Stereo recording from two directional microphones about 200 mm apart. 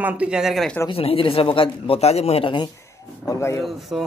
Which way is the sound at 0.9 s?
30° left (ahead or behind).